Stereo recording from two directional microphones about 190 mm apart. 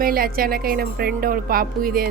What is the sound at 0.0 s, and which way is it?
A woman's voice, 50° right (ahead or behind).